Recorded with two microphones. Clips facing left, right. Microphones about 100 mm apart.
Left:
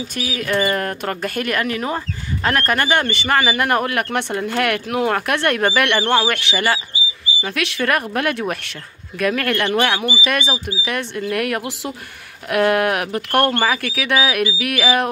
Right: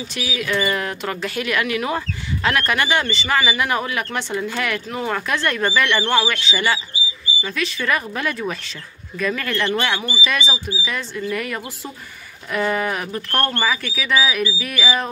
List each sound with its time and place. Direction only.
0.1 s a man's voice: 45° left (ahead or behind)
7.4 s a man's voice: 65° left (ahead or behind)
13.3 s speech: 15° left (ahead or behind)
13.6 s a man's voice: 55° left (ahead or behind)